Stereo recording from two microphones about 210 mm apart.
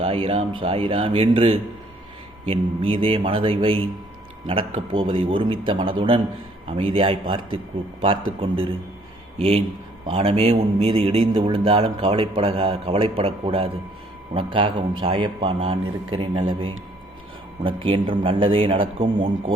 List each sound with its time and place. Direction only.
0.0 s a man's voice: 25° right (ahead or behind)
4.9 s a man's voice: 25° right (ahead or behind)